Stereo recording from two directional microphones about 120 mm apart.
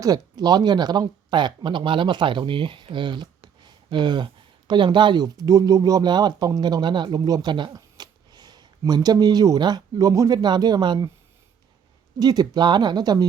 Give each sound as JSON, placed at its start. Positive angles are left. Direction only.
{"t": 0.0, "sound": "speech", "side_deg": -30}
{"t": 12.2, "sound": "speech", "side_deg": -35}